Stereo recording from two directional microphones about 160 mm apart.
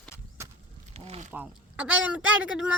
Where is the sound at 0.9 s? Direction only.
40° right (ahead or behind).